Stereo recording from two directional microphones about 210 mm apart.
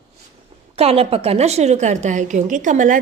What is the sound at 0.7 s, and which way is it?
A woman's voice, 30° right (ahead or behind).